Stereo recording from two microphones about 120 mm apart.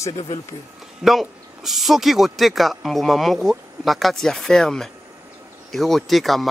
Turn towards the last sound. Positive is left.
turn(degrees=0)  # may be behind; listen again after turning